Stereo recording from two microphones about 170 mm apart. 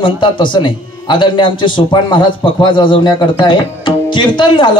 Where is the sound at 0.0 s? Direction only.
30° left (ahead or behind).